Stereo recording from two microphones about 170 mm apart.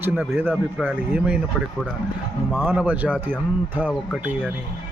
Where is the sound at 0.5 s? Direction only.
5° right (ahead or behind).